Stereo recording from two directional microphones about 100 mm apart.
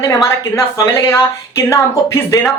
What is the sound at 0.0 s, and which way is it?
Speech, 35° left (ahead or behind).